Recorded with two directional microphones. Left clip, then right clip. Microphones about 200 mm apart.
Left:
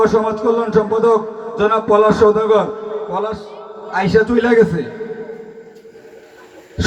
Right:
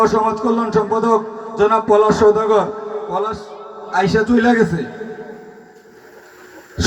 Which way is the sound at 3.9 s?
50° right (ahead or behind).